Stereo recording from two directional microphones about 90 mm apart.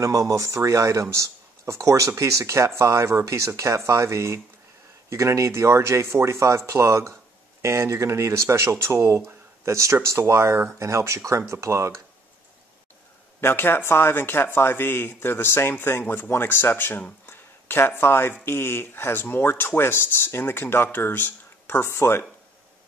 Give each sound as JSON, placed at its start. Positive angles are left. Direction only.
{"t": 0.0, "sound": "speech", "side_deg": -40}
{"t": 13.4, "sound": "speech", "side_deg": 25}